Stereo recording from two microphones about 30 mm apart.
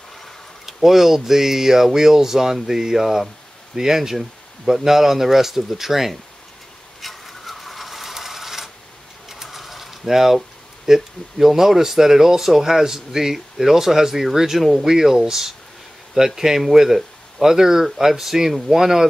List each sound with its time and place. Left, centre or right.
0.7 s speech: centre
7.0 s a sound: centre
9.3 s mechanisms: centre
10.9 s speech: centre
14.6 s speech: centre
15.0 s speech: centre